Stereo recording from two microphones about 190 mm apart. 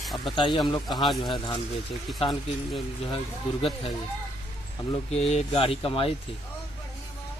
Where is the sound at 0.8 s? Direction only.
Centre (ahead or behind).